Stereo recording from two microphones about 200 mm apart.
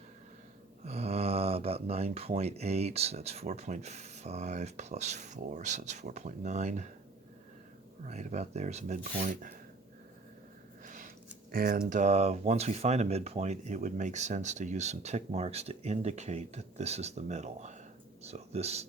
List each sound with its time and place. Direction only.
0.9 s speech: 30° right (ahead or behind)
8.0 s speech: 35° right (ahead or behind)
10.8 s a sound: 40° right (ahead or behind)
11.5 s speech: 45° right (ahead or behind)
11.9 s speech: 35° right (ahead or behind)